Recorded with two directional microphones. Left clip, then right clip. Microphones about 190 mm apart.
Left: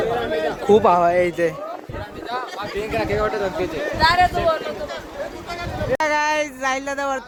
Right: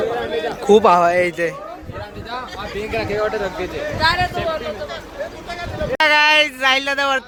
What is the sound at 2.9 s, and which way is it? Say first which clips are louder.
Speech: right 1 dB; 70° left (ahead or behind).